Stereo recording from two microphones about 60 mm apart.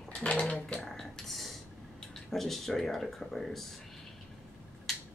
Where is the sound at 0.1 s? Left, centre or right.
Centre.